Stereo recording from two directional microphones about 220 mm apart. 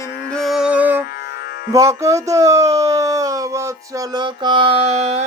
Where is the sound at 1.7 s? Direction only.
15° right (ahead or behind).